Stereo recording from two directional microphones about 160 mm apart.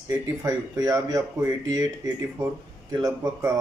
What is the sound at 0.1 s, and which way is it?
Speech, 20° right (ahead or behind).